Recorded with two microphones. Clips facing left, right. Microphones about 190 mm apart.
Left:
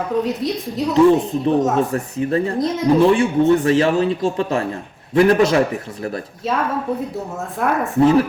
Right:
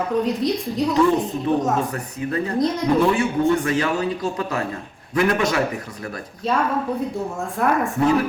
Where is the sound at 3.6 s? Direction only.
30° left (ahead or behind).